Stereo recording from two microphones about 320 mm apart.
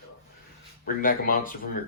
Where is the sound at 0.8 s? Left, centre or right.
Left.